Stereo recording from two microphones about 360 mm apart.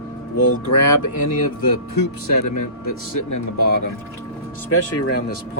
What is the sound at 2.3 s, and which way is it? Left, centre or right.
Speech, left.